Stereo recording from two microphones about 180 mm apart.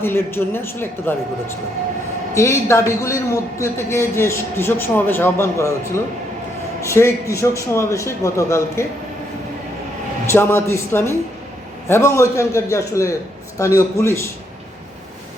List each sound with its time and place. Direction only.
0.0 s a man's voice: 10° left (ahead or behind)
2.3 s a man's voice: 15° left (ahead or behind)
10.2 s a man's voice: 15° left (ahead or behind)